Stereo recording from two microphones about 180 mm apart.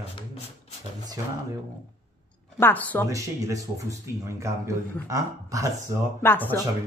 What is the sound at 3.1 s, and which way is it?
Speech, 15° right (ahead or behind).